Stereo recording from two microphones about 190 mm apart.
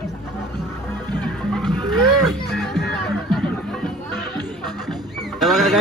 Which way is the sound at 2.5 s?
Centre (ahead or behind).